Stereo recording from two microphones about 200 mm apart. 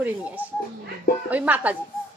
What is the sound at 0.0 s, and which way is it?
A man's voice, 5° right (ahead or behind).